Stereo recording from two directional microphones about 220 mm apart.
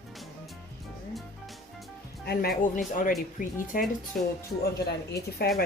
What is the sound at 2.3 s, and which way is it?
Speech, 45° left (ahead or behind).